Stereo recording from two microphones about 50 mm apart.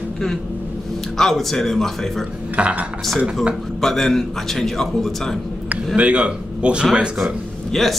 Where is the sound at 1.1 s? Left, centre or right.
Centre.